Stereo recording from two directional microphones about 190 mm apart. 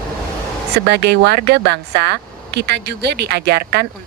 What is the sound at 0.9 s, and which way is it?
A woman's voice, 60° right (ahead or behind).